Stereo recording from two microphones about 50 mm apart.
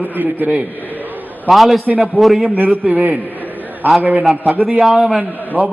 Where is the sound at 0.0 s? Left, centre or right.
Right.